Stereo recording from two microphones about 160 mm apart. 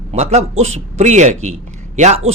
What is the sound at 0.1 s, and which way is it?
A man's voice, 45° right (ahead or behind).